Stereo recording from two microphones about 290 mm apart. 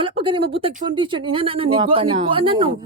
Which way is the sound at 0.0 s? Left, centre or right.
Centre.